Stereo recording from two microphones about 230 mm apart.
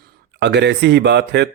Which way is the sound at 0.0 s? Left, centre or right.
Right.